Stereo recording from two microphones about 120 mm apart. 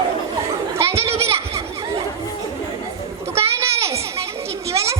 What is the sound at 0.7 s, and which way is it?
Children playing, 20° right (ahead or behind).